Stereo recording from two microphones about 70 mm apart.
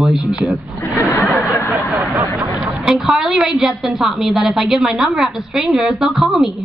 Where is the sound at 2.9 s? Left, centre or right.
Centre.